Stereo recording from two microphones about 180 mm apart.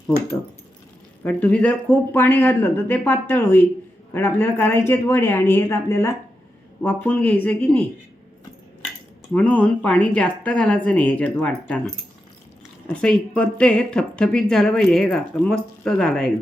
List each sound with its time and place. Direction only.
1.2 s speech: 10° left (ahead or behind)
9.3 s speech: 10° left (ahead or behind)
12.9 s a woman's voice: 5° left (ahead or behind)